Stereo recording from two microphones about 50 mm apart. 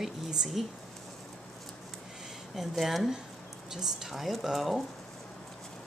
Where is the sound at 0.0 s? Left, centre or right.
Centre.